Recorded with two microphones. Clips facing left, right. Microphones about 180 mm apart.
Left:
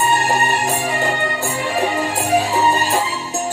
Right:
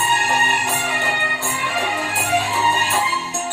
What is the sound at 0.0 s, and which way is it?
Music, 35° left (ahead or behind).